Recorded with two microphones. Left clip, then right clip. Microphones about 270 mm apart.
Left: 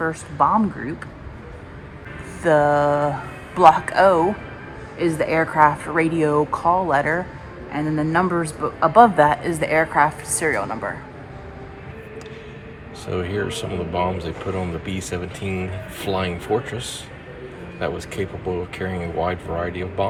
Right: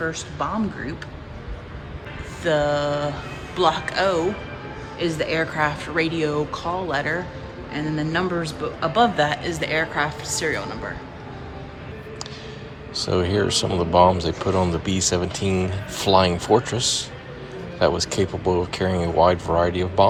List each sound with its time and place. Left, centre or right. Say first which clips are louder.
0.0 s a man's voice: left 7 dB; centre
2.4 s a man's voice: left 5 dB; centre
13.1 s speech: right 3 dB; centre